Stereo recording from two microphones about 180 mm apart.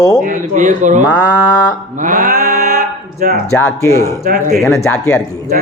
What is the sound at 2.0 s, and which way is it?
Mantra, 45° right (ahead or behind).